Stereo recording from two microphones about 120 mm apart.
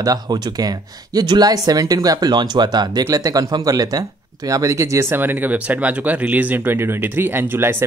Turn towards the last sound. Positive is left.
turn(degrees=-20)  # may be behind; listen again after turning